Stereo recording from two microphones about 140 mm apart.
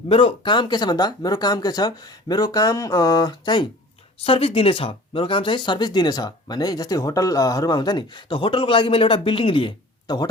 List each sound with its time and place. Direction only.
0.1 s speech: 40° left (ahead or behind)
4.2 s speech: 45° left (ahead or behind)